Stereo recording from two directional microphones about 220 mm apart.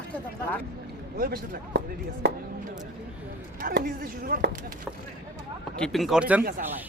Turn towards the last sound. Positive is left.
turn(degrees=-5)  # may be behind; listen again after turning